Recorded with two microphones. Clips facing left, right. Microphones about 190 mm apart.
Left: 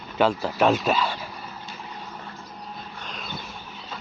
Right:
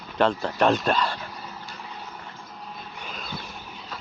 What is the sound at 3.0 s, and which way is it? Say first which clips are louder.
Vehicle: right 1 dB; centre (ahead or behind).